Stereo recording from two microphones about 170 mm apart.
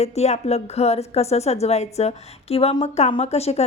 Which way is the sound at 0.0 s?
40° left (ahead or behind).